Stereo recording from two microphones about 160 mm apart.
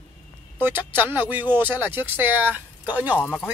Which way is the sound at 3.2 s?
10° left (ahead or behind).